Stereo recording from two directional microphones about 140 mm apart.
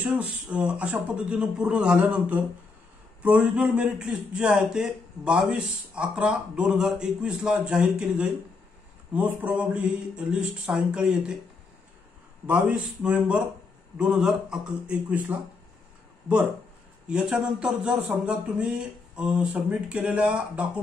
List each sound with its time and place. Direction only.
0.0 s a man's voice: 5° right (ahead or behind)
12.4 s a man's voice: 5° right (ahead or behind)
17.1 s a man's voice: 5° right (ahead or behind)